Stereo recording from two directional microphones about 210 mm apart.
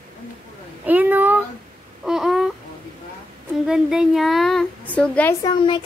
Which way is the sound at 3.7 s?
5° right (ahead or behind).